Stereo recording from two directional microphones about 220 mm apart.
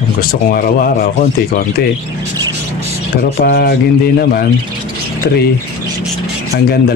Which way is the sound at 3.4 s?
45° left (ahead or behind).